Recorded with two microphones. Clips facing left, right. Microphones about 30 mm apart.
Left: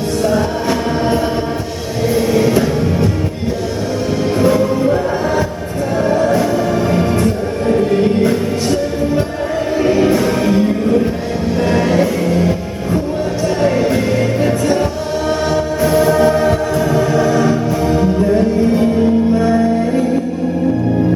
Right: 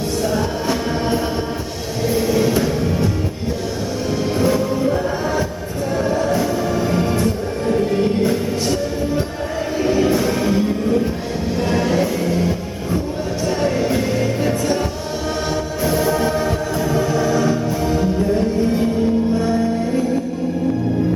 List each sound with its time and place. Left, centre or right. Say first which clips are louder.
0.2 s music: left 6 dB; centre
4.4 s music: left 5 dB; centre
7.7 s music: left 4 dB; centre
15.4 s choir: left 5 dB; centre